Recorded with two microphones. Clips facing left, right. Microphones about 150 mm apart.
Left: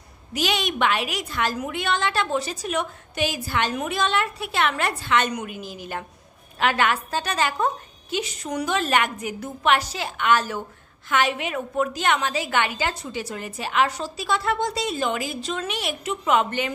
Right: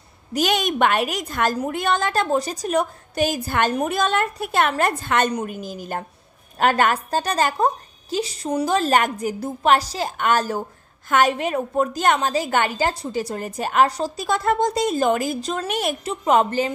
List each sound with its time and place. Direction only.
0.3 s a woman's voice: 45° right (ahead or behind)